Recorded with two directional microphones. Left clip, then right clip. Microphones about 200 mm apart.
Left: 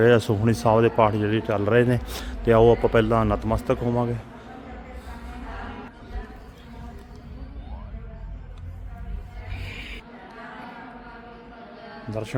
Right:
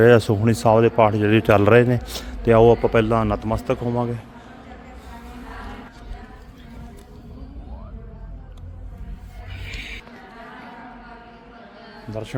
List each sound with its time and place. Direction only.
0.0 s a man's voice: 15° right (ahead or behind)
1.8 s a man's voice: 15° right (ahead or behind)
9.6 s music: 5° right (ahead or behind)
12.1 s speech: centre (ahead or behind)